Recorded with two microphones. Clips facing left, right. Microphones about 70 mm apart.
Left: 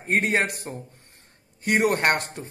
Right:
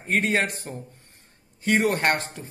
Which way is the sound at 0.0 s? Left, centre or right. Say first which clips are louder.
Left 1 dB; left.